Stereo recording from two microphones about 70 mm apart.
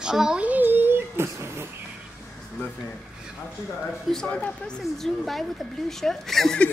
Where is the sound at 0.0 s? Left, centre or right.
Centre.